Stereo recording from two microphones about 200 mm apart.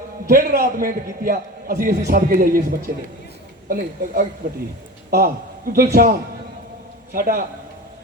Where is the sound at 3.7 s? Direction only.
45° right (ahead or behind).